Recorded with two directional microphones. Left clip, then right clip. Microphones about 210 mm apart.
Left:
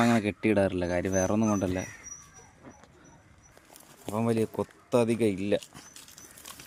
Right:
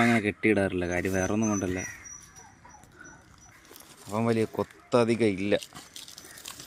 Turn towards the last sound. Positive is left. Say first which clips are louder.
# right 2 dB
turn(degrees=5)  # may be behind; listen again after turning